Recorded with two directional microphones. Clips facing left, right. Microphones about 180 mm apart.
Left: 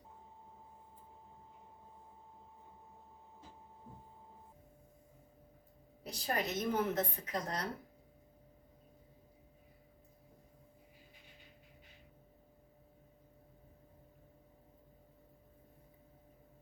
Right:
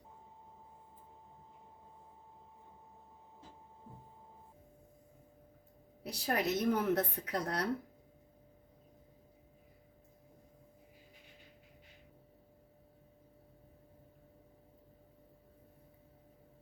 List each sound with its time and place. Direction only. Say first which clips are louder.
6.1 s speech: right 3 dB; 70° right (ahead or behind)